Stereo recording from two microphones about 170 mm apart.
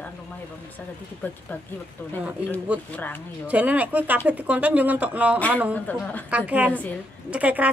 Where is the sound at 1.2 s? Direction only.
10° left (ahead or behind).